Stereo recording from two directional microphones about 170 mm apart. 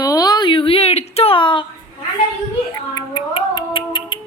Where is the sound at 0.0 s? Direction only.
20° left (ahead or behind).